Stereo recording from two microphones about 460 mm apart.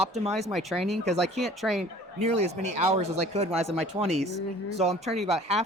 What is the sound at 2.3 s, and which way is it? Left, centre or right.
Speech, right.